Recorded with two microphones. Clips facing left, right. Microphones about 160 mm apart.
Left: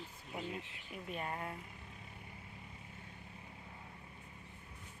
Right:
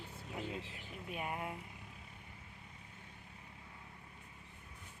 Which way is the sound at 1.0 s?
10° right (ahead or behind).